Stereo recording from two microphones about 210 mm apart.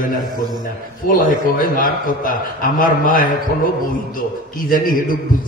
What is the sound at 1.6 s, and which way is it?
A man's voice, 40° left (ahead or behind).